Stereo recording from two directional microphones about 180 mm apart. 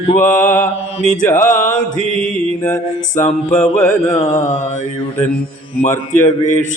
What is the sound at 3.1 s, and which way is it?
Mantra, 40° left (ahead or behind).